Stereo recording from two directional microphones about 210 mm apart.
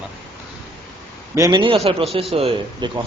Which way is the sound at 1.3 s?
20° right (ahead or behind).